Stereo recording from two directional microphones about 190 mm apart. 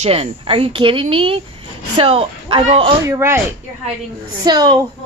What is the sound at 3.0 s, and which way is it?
Speech, 15° right (ahead or behind).